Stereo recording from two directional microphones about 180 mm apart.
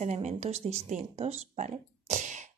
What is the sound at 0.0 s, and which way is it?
Speech, 40° right (ahead or behind).